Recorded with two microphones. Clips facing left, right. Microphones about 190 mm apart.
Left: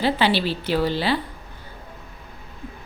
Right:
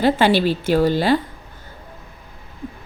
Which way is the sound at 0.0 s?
50° right (ahead or behind).